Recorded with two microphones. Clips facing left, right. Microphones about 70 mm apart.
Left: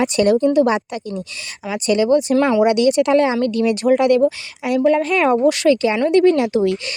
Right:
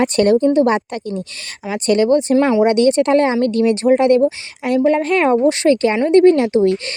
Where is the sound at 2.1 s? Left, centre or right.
Right.